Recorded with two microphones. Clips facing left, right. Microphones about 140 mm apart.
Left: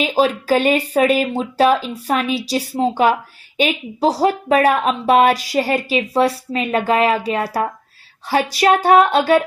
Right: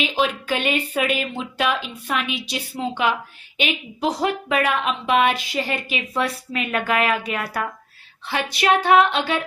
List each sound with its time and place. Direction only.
0.0 s speech: 40° left (ahead or behind)